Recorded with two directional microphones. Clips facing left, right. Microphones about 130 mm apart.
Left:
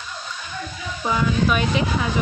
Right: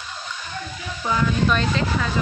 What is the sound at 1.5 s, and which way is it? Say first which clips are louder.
Speech: left 1 dB; 15° left (ahead or behind).